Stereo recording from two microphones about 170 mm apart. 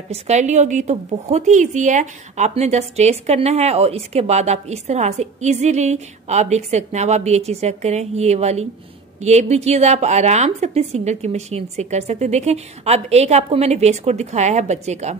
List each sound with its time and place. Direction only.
0.1 s a woman's voice: 45° right (ahead or behind)